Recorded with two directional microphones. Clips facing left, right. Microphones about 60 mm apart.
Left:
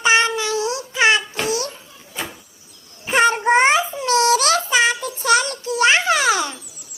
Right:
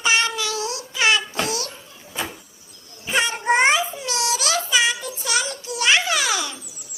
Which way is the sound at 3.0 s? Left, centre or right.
Left.